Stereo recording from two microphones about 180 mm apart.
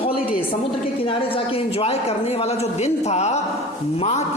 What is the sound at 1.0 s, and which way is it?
A man's voice, 30° left (ahead or behind).